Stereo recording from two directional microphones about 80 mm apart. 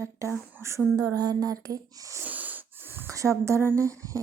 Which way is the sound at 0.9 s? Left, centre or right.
Right.